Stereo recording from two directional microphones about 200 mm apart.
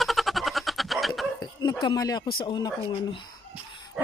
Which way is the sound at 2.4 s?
20° left (ahead or behind).